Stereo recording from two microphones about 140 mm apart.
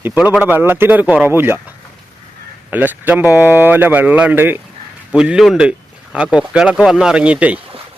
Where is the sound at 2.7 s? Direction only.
10° right (ahead or behind).